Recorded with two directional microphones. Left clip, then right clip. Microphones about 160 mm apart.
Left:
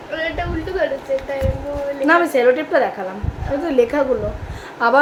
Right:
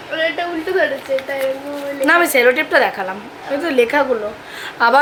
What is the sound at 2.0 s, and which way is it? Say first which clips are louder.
A woman's voice: right 2 dB; 5° left (ahead or behind).